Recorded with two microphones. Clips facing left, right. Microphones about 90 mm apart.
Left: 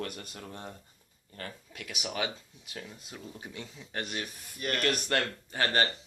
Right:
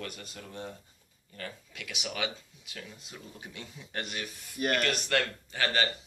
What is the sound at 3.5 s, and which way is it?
Speech, 10° left (ahead or behind).